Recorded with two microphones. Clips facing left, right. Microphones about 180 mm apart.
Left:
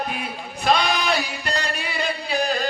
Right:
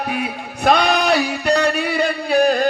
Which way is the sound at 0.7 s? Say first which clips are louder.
Right 5 dB; 55° right (ahead or behind).